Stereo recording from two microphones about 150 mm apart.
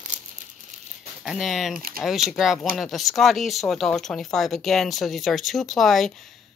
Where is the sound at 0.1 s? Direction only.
55° right (ahead or behind).